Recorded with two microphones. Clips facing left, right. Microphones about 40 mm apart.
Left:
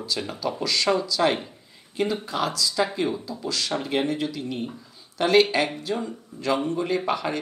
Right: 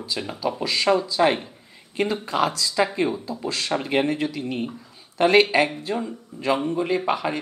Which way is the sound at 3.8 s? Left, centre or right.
Right.